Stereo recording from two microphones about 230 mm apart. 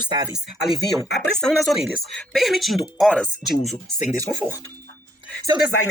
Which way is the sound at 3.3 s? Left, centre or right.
Left.